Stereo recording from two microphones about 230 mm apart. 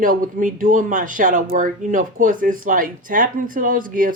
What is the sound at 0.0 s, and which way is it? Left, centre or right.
Speech, right.